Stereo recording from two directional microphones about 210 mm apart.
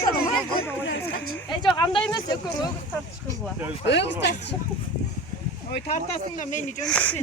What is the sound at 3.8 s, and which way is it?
Speech, 55° left (ahead or behind).